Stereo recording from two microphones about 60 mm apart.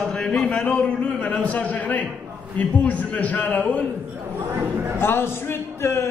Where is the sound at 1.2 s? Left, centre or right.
Left.